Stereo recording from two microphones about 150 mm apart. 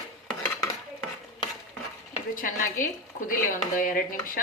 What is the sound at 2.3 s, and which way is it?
Speech, 65° left (ahead or behind).